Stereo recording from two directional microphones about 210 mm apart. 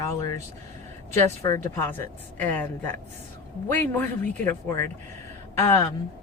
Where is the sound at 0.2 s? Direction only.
15° left (ahead or behind).